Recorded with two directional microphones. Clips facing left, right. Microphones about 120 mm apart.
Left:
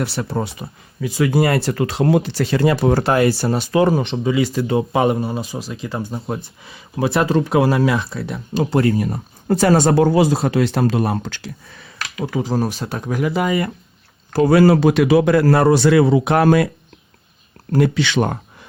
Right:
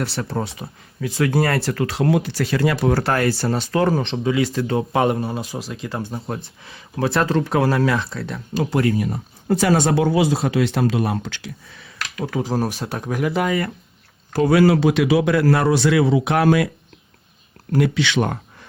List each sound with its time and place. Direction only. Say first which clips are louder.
0.0 s speech: left 2 dB; 10° left (ahead or behind)
4.1 s speech: left 2 dB; centre (ahead or behind)
8.5 s speech: left 3 dB; 30° left (ahead or behind)
12.2 s speech: left 2 dB; centre (ahead or behind)
14.3 s speech: left 3 dB; 35° left (ahead or behind)
17.7 s speech: left 2 dB; 35° left (ahead or behind)